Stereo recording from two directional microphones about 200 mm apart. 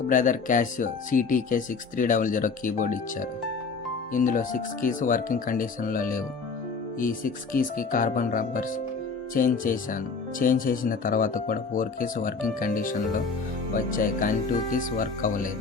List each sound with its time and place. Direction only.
0.1 s speech: 40° left (ahead or behind)